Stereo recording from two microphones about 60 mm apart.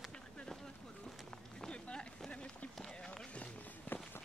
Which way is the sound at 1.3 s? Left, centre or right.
Centre.